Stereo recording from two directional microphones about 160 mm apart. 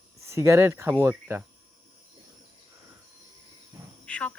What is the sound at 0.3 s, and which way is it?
Speech, 20° right (ahead or behind).